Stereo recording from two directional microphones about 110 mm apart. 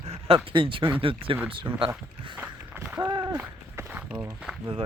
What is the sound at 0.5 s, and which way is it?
Speech, 50° right (ahead or behind).